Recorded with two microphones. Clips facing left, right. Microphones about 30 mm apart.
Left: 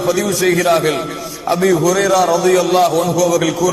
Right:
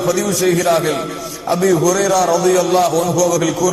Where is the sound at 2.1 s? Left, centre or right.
Centre.